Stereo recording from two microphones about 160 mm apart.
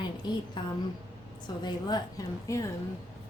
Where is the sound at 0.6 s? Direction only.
30° left (ahead or behind).